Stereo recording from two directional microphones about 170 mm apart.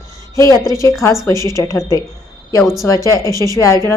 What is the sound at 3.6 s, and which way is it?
Speech, 15° left (ahead or behind).